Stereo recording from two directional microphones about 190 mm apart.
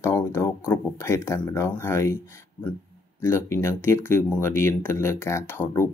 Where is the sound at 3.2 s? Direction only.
15° left (ahead or behind).